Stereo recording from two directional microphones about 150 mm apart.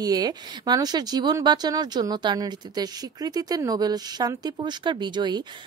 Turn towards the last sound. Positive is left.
turn(degrees=-30)  # may be behind; listen again after turning